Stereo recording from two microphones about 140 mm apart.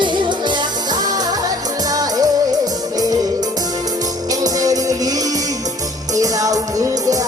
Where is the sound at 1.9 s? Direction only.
25° right (ahead or behind).